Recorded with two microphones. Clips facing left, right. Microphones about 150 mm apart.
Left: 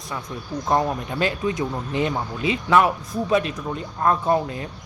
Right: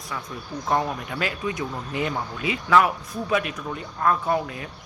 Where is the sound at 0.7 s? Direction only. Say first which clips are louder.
Left 3 dB; 20° left (ahead or behind).